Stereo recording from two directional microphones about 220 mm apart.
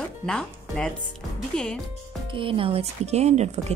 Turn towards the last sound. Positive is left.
turn(degrees=-30)  # may be behind; listen again after turning